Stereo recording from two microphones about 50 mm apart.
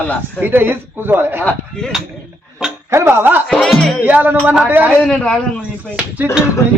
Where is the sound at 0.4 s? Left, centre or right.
Right.